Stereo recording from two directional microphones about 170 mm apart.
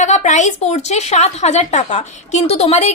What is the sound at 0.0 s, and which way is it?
A woman's voice, 45° left (ahead or behind).